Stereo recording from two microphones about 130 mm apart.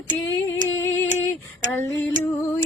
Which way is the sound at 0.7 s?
15° left (ahead or behind).